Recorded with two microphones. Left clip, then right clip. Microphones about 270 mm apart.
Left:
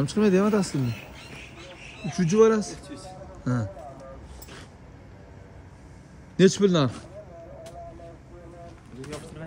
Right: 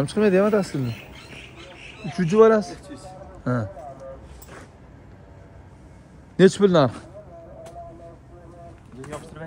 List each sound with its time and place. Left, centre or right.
0.0 s speech: centre
2.0 s speech: centre
6.3 s speech: centre
9.0 s a sound: centre